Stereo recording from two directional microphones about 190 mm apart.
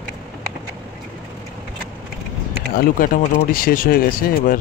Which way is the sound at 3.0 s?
45° left (ahead or behind).